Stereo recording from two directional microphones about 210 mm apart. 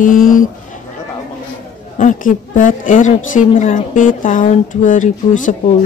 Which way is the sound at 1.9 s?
40° left (ahead or behind).